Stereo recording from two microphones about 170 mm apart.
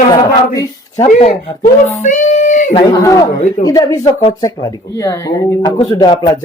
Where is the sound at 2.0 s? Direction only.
45° left (ahead or behind).